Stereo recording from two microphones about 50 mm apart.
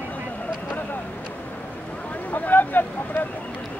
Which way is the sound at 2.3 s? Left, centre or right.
Left.